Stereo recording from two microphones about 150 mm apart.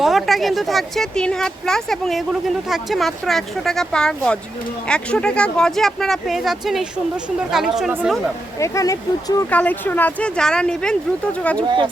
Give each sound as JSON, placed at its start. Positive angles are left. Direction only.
{"t": 0.0, "sound": "speech", "side_deg": 0}
{"t": 8.5, "sound": "speech", "side_deg": 20}
{"t": 9.5, "sound": "speech", "side_deg": 10}